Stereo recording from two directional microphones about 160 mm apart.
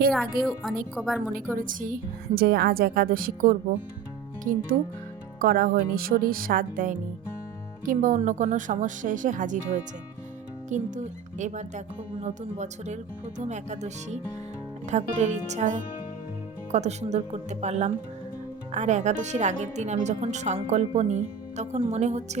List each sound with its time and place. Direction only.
0.1 s a woman's voice: centre (ahead or behind)
1.5 s a woman's voice: 60° right (ahead or behind)
10.7 s speech: 50° right (ahead or behind)